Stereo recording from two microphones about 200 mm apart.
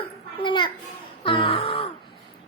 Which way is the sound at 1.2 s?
25° left (ahead or behind).